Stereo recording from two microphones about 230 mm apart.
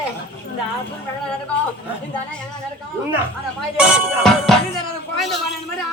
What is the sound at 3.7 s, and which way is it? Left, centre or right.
Speech, centre.